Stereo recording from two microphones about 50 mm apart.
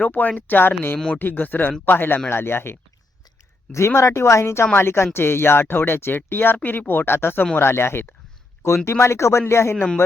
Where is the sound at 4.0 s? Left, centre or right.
Left.